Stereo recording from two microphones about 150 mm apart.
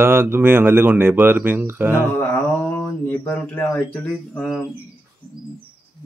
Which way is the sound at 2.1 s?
15° left (ahead or behind).